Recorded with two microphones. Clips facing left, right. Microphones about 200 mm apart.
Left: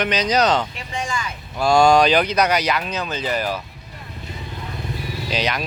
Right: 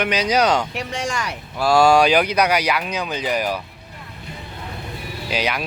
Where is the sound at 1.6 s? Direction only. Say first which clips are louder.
Even; 5° right (ahead or behind).